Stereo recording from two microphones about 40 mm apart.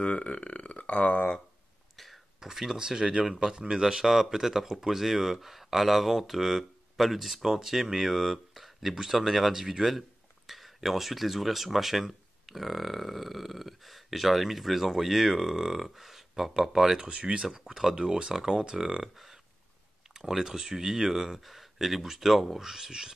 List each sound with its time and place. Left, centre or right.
0.0 s speech: left
2.4 s speech: centre
17.1 s speech: right